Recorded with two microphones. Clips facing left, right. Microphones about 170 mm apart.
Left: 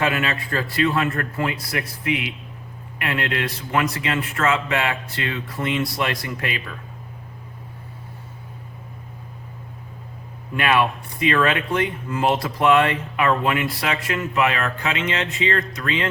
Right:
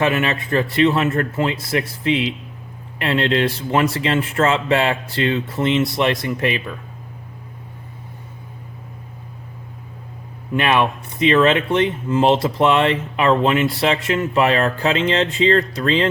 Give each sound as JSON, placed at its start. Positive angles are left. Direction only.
{"t": 0.0, "sound": "speech", "side_deg": -25}
{"t": 10.5, "sound": "speech", "side_deg": -20}